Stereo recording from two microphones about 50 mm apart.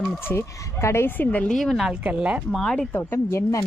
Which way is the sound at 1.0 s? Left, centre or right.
Left.